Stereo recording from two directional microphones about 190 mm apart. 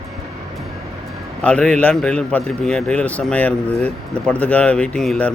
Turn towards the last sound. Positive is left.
turn(degrees=5)  # may be behind; listen again after turning